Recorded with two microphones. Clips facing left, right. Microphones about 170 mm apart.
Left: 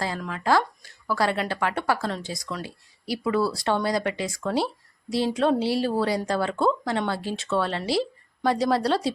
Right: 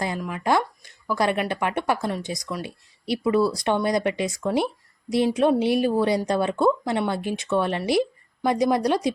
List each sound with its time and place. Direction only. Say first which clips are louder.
0.0 s speech: right 2 dB; 15° right (ahead or behind)